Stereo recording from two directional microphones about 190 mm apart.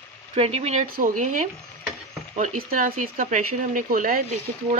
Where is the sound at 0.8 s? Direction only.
50° right (ahead or behind).